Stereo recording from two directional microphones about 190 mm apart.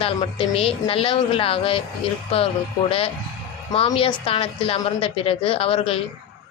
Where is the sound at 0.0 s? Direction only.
30° left (ahead or behind).